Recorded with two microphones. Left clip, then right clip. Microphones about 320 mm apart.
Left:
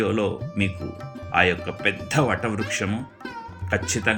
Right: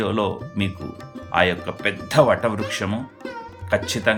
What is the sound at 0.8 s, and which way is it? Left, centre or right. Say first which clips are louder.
Speech: even; centre.